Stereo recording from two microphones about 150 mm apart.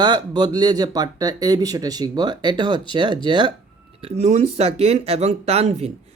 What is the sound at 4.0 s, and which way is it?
Speech, 45° right (ahead or behind).